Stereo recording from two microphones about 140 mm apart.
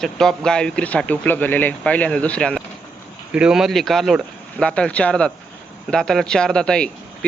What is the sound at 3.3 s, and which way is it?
A man's voice, 5° right (ahead or behind).